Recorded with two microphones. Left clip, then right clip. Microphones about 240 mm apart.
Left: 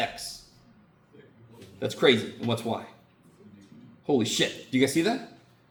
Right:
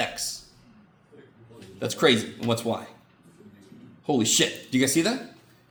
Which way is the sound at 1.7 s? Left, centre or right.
Right.